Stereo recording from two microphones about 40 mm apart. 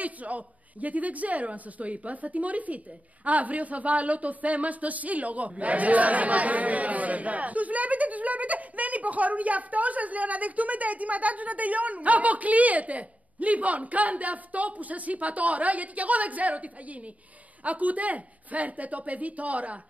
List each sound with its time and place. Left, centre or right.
0.0 s speech: right